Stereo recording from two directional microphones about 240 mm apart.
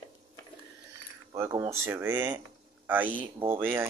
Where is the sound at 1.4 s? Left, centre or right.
Centre.